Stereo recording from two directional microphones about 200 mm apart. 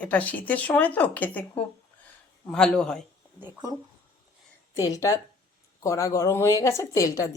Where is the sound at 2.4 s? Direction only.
5° left (ahead or behind).